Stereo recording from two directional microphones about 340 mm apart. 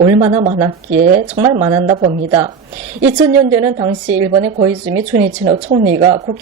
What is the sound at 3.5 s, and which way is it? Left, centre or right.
A woman's voice, centre.